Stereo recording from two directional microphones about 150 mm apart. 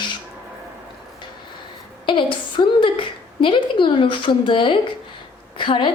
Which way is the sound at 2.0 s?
35° left (ahead or behind).